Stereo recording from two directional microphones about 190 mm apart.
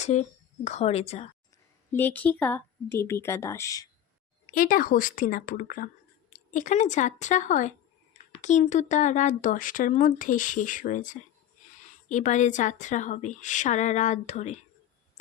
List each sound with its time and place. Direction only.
0.0 s a woman's voice: 35° left (ahead or behind)
1.9 s speech: 10° left (ahead or behind)
4.5 s a woman's voice: 45° left (ahead or behind)